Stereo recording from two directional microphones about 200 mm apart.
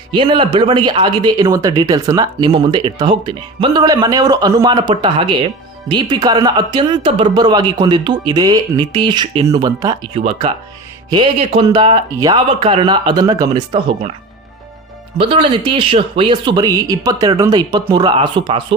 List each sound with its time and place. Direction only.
0.1 s speech: 25° right (ahead or behind)
15.2 s speech: 25° right (ahead or behind)